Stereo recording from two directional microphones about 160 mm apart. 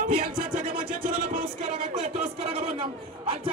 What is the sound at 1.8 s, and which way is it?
Speech, 45° right (ahead or behind).